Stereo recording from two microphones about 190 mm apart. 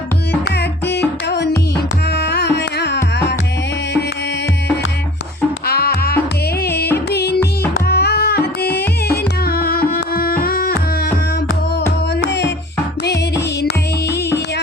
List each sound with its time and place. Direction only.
0.5 s music: 60° left (ahead or behind)
5.6 s music: 55° left (ahead or behind)
12.2 s music: 65° left (ahead or behind)
14.1 s music: 15° left (ahead or behind)